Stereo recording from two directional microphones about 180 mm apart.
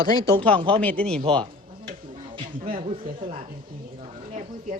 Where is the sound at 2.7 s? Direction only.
30° right (ahead or behind).